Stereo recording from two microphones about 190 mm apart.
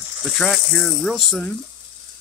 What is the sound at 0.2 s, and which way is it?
Speech, centre (ahead or behind).